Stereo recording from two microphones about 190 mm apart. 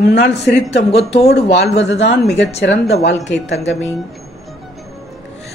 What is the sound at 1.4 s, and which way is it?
Speech, 65° left (ahead or behind).